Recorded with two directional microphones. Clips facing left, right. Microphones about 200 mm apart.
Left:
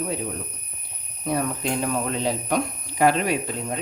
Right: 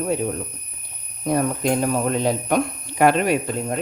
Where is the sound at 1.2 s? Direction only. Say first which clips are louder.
Right 5 dB; 45° right (ahead or behind).